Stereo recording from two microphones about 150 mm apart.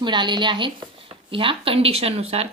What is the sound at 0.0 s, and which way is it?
A woman's voice, 30° right (ahead or behind).